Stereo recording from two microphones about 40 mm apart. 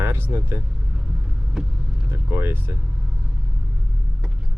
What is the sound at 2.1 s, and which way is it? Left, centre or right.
Vehicle, right.